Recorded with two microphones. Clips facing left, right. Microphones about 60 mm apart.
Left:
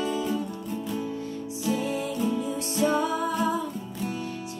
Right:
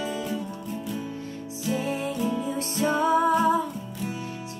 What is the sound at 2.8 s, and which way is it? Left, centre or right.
Music, right.